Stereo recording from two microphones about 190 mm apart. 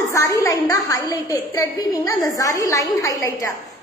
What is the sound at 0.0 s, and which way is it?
A woman's voice, 15° left (ahead or behind).